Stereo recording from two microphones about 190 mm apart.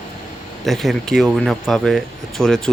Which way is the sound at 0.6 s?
Centre (ahead or behind).